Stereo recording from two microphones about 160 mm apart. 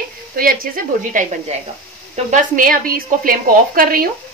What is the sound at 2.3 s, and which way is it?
Speech, 60° right (ahead or behind).